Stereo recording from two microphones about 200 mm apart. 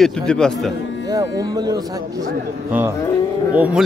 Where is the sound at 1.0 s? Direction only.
20° right (ahead or behind).